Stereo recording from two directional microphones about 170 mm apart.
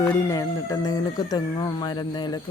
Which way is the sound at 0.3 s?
20° left (ahead or behind).